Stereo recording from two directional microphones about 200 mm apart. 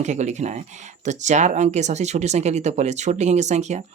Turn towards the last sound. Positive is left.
turn(degrees=-35)  # may be behind; listen again after turning